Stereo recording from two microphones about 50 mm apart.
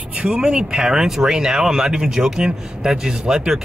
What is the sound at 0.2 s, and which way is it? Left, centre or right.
Speech, centre.